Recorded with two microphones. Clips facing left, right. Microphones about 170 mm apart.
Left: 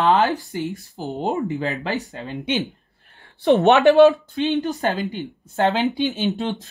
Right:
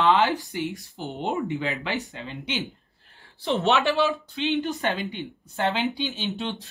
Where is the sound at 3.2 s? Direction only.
60° left (ahead or behind).